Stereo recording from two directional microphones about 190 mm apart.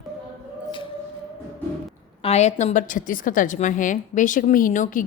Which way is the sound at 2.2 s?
35° left (ahead or behind).